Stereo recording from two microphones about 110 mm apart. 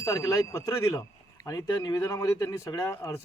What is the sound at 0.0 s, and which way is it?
A man's voice, 30° left (ahead or behind).